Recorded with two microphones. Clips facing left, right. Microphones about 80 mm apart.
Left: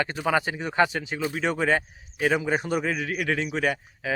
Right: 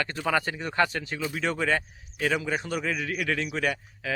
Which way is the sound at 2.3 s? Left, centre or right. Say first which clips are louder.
Left 4 dB; left.